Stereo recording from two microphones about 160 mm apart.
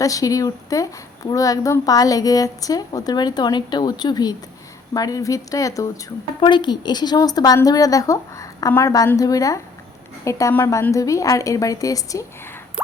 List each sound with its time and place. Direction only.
0.0 s a woman's voice: 20° left (ahead or behind)